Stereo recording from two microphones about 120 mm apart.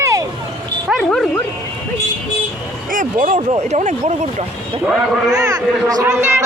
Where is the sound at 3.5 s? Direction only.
70° right (ahead or behind).